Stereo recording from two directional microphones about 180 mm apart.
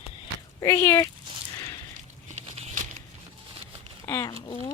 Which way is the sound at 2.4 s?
35° right (ahead or behind).